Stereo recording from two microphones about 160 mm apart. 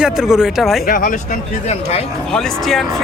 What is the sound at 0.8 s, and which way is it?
Speech, 60° left (ahead or behind).